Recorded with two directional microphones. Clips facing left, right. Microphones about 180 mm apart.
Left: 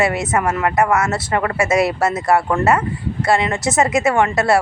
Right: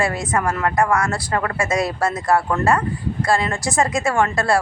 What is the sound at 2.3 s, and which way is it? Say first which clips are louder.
Speech: left 2 dB; 25° left (ahead or behind).